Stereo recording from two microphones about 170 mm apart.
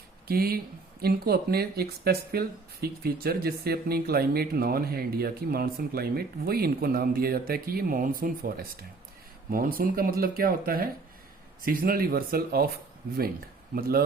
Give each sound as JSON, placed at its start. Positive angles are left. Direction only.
{"t": 0.3, "sound": "speech", "side_deg": -60}
{"t": 13.7, "sound": "speech", "side_deg": -60}